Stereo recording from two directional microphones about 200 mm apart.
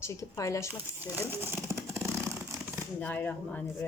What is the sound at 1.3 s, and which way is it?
Vehicle, 10° right (ahead or behind).